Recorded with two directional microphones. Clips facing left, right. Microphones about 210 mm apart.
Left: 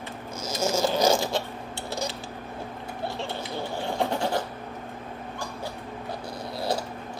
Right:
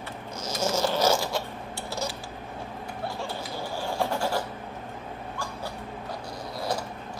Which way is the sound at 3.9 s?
20° left (ahead or behind).